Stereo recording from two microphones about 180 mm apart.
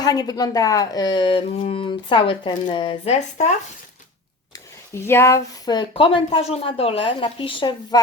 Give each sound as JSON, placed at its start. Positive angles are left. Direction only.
{"t": 0.0, "sound": "speech", "side_deg": 20}
{"t": 5.0, "sound": "speech", "side_deg": 15}